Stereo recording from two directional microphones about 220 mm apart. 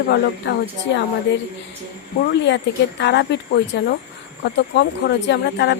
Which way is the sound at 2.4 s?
50° left (ahead or behind).